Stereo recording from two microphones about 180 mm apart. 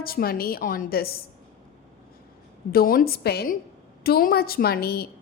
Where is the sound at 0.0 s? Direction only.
55° left (ahead or behind).